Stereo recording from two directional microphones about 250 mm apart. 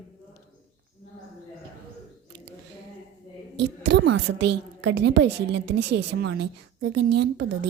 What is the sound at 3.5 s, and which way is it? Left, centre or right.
A woman's voice, right.